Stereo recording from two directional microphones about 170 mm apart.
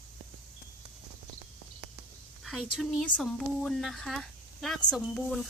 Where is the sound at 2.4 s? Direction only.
Centre (ahead or behind).